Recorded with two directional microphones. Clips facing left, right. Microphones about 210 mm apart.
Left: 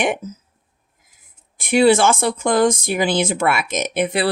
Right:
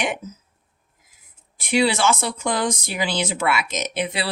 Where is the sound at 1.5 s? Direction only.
50° left (ahead or behind).